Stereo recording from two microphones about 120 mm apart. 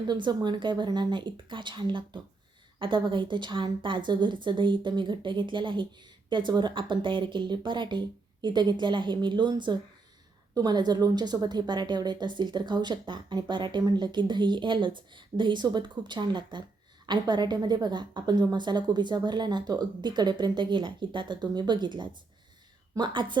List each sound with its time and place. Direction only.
0.1 s a woman's voice: 35° right (ahead or behind)